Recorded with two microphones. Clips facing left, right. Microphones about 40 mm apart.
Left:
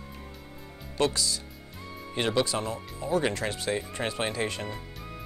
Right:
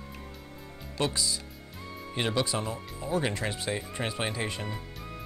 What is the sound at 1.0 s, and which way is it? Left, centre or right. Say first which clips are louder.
Speech: left 3 dB; centre.